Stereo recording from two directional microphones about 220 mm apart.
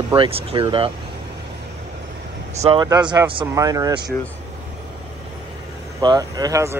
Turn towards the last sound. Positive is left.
turn(degrees=-15)  # may be behind; listen again after turning